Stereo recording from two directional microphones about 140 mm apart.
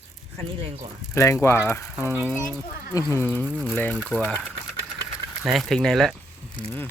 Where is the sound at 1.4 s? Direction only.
20° left (ahead or behind).